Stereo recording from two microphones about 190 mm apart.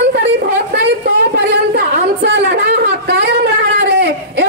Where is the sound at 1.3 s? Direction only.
55° right (ahead or behind).